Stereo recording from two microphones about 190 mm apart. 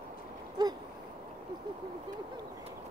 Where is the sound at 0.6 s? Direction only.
20° right (ahead or behind).